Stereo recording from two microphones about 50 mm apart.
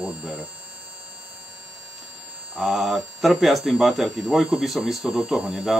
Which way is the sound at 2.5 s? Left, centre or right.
Centre.